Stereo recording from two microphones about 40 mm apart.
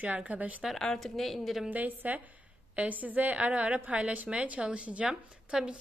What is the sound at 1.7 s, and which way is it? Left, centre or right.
A woman's voice, right.